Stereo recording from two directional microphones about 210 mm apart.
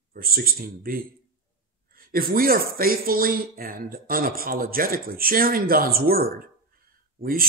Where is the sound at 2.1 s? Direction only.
45° right (ahead or behind).